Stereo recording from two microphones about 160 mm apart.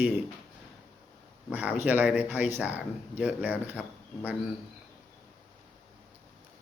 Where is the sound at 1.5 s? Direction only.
10° right (ahead or behind).